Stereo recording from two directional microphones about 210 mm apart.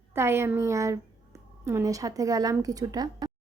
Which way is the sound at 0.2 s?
10° right (ahead or behind).